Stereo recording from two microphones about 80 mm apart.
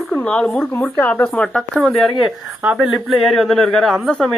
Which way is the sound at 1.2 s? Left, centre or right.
Centre.